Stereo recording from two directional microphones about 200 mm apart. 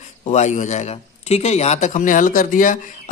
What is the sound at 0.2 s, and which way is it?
A man's voice, 35° left (ahead or behind).